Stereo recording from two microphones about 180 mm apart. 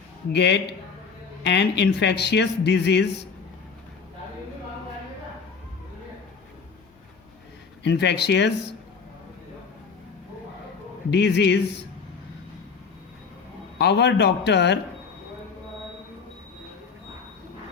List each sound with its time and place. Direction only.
0.3 s speech: 75° left (ahead or behind)
7.9 s speech: 70° left (ahead or behind)
11.1 s speech: 70° left (ahead or behind)
13.7 s speech: 70° left (ahead or behind)